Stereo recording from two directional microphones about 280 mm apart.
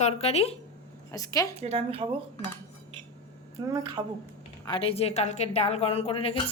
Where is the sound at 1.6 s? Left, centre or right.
Right.